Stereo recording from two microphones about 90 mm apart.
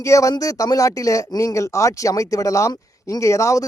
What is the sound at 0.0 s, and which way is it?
Speech, 35° left (ahead or behind).